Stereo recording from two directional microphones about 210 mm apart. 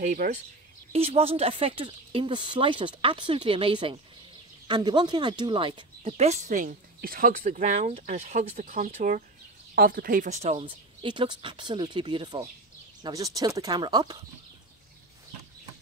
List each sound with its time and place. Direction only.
0.0 s speech: 35° right (ahead or behind); by 14.1 s 20° right (ahead or behind)